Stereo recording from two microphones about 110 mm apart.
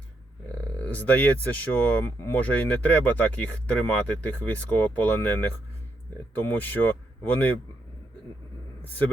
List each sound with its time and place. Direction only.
0.8 s speech: 15° left (ahead or behind)